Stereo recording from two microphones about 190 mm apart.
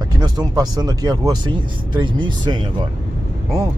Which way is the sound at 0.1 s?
20° right (ahead or behind).